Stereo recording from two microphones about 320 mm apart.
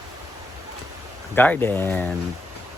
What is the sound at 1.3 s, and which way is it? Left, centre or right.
Speech, centre.